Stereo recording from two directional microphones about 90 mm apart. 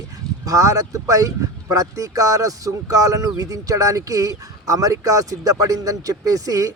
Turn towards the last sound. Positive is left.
turn(degrees=-40)  # may be behind; listen again after turning